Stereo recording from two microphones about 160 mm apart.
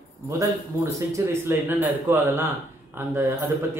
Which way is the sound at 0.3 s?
20° right (ahead or behind).